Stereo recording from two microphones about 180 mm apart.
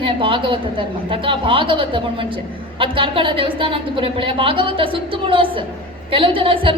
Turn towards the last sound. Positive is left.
turn(degrees=-30)  # may be behind; listen again after turning